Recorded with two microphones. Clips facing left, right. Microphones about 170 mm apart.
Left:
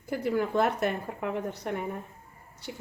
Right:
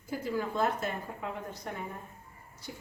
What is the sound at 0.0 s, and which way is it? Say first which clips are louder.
A woman's voice: left 5 dB; 65° left (ahead or behind).